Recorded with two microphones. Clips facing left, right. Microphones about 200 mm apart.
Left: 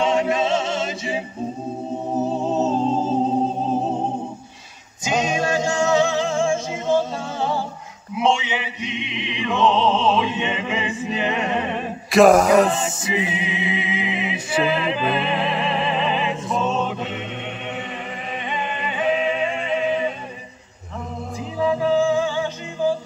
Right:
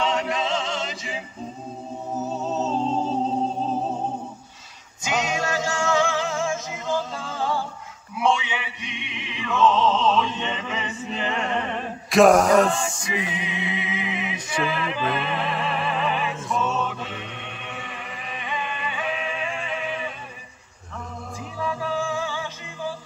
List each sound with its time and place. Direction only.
0.0 s music: 20° left (ahead or behind)
2.6 s music: 10° left (ahead or behind)
3.7 s music: 25° left (ahead or behind)
8.2 s male singing: 25° left (ahead or behind)
12.1 s a sound: centre (ahead or behind)
12.6 s music: 20° left (ahead or behind)
18.5 s music: 25° left (ahead or behind)
21.5 s music: 20° left (ahead or behind)